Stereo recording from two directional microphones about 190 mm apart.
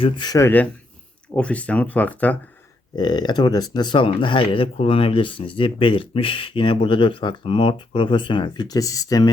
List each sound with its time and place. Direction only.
0.0 s speech: 20° left (ahead or behind)
2.9 s speech: 25° left (ahead or behind)